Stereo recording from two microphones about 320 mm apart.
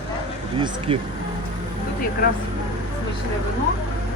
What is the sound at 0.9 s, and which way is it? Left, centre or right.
Speech, centre.